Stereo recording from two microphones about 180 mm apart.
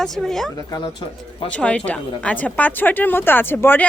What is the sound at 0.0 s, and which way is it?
Speech, centre (ahead or behind).